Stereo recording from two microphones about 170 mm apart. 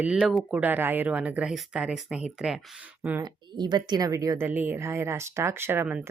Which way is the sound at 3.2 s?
25° right (ahead or behind).